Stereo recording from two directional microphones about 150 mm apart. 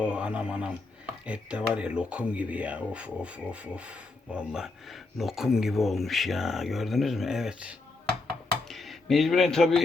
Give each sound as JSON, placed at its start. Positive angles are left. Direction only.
{"t": 0.0, "sound": "speech", "side_deg": -5}